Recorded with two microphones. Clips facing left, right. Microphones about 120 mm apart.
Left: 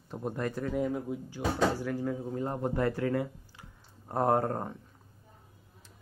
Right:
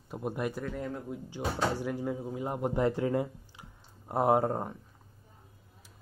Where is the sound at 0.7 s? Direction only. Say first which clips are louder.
Left 5 dB; 5° left (ahead or behind).